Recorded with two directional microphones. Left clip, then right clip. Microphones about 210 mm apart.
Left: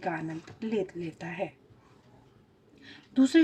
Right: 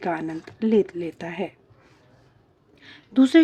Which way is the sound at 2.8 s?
45° right (ahead or behind).